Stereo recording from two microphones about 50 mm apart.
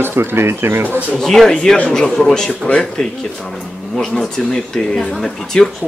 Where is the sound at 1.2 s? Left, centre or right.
Centre.